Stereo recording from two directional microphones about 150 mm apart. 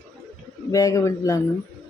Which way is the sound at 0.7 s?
25° left (ahead or behind).